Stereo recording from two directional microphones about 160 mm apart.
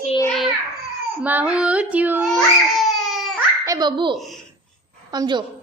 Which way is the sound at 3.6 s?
25° right (ahead or behind).